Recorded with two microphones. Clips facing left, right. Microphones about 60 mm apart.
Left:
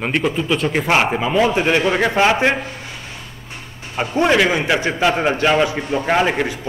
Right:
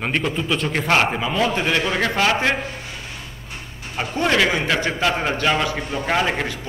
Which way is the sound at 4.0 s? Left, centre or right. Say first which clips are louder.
Left 4 dB; centre.